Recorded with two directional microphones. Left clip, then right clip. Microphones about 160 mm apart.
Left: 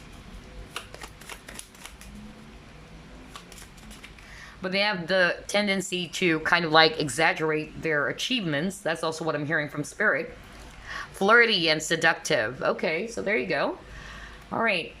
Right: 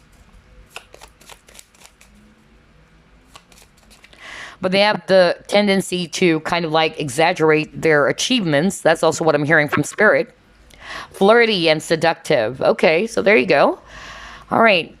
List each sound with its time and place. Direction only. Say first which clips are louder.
4.3 s speech: right 11 dB; 45° right (ahead or behind); by 7.3 s 20° right (ahead or behind)
7.3 s speech: right 12 dB; 40° right (ahead or behind)
12.7 s speech: right 13 dB; 40° right (ahead or behind)